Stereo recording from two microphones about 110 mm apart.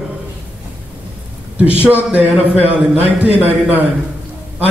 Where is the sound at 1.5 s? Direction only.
15° right (ahead or behind).